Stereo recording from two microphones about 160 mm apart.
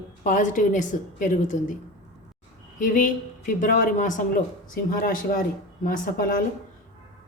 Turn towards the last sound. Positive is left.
turn(degrees=60)  # may be behind; listen again after turning